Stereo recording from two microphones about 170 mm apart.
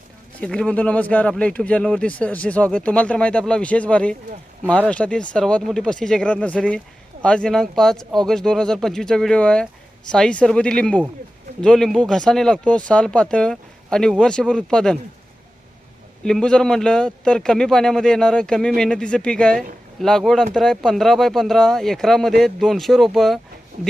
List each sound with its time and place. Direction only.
0.3 s speech: 5° left (ahead or behind)
16.2 s speech: 5° left (ahead or behind)
23.7 s speech: 60° right (ahead or behind)